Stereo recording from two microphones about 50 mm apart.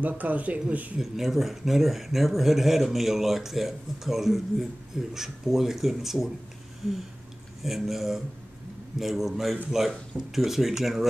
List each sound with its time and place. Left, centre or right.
0.0 s speech: right
0.9 s speech: centre
7.6 s speech: centre